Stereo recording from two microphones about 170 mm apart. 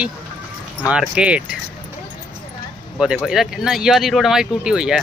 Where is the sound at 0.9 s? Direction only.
5° right (ahead or behind).